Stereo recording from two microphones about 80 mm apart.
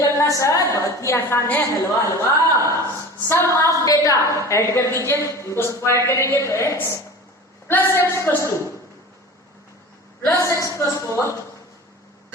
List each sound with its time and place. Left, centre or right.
0.0 s a woman's voice: left
3.2 s a woman's voice: left
8.4 s a woman's voice: left
10.2 s a woman's voice: left